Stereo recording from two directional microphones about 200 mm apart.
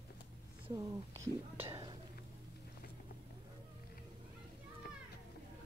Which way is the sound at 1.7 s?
20° right (ahead or behind).